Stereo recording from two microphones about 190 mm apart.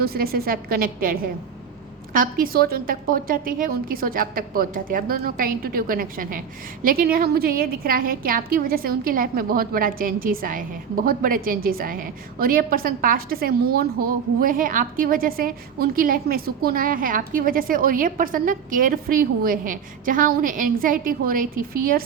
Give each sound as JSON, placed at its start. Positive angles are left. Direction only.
{"t": 0.0, "sound": "a woman's voice", "side_deg": -55}